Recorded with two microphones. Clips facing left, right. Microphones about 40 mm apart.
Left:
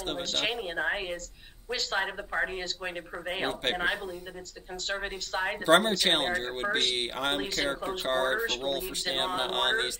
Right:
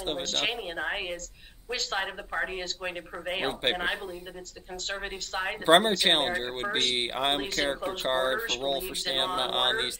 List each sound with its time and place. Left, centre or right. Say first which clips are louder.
0.2 s a woman's voice: even; centre
3.3 s a woman's voice: right 2 dB; centre
5.7 s speech: right 2 dB; centre
8.4 s a woman's voice: right 1 dB; centre